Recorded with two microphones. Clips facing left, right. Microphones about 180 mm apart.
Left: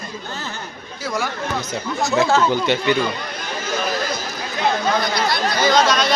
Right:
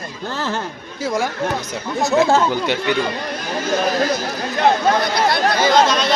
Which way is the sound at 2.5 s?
10° right (ahead or behind).